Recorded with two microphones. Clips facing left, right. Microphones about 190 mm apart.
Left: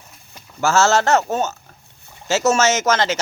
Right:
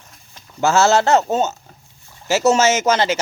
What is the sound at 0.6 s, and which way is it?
Speech, 15° right (ahead or behind).